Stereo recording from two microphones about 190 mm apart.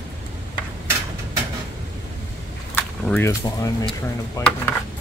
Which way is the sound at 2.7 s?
10° left (ahead or behind).